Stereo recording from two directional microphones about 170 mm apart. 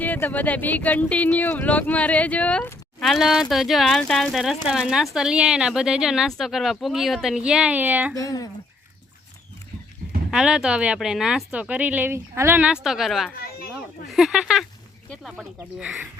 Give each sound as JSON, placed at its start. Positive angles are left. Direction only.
{"t": 0.0, "sound": "speech", "side_deg": 10}
{"t": 8.1, "sound": "speech", "side_deg": 20}
{"t": 10.3, "sound": "speech", "side_deg": -5}